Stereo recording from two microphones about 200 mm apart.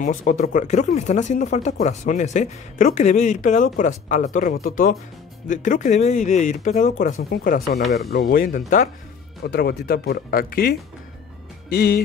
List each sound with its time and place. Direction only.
0.0 s speech: 40° left (ahead or behind)
9.4 s speech: 50° left (ahead or behind)